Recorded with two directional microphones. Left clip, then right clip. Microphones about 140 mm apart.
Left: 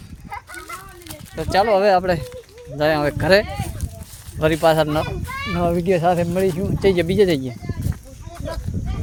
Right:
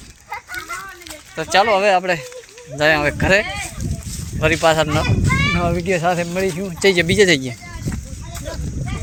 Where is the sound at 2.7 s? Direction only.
25° left (ahead or behind).